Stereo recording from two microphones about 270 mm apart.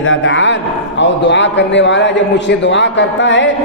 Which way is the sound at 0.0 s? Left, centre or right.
Left.